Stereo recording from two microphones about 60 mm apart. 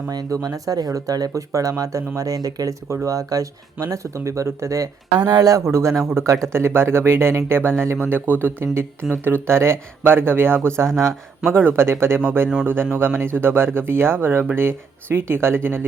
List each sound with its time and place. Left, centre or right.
0.1 s speech: right
2.9 s speech: right
3.8 s speech: right
5.6 s speech: right
8.0 s speech: right
10.8 s speech: centre
11.5 s speech: right